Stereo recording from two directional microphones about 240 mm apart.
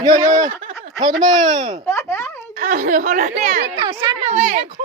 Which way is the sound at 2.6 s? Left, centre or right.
Right.